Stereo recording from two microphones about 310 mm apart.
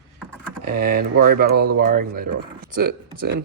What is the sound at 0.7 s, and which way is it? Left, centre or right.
Speech, right.